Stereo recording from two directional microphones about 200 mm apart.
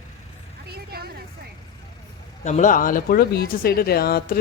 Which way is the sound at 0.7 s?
50° right (ahead or behind).